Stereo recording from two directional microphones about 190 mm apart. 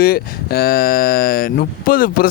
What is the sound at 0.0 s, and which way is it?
Speech, 50° left (ahead or behind).